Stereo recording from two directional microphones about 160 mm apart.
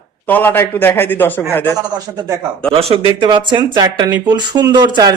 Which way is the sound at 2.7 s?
40° right (ahead or behind).